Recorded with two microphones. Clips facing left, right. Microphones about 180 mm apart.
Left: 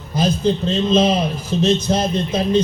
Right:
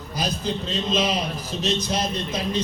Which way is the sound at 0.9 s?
25° left (ahead or behind).